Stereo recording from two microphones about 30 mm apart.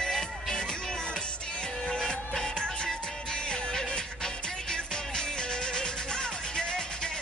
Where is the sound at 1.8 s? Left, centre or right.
Left.